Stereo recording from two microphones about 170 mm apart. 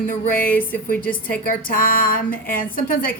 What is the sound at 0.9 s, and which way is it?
Speech, 10° left (ahead or behind).